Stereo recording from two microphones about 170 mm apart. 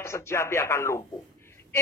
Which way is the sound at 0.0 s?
15° left (ahead or behind).